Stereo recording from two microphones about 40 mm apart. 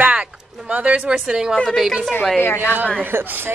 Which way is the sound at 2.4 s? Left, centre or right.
Left.